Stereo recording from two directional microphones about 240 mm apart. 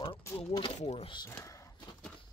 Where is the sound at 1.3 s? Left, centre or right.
Centre.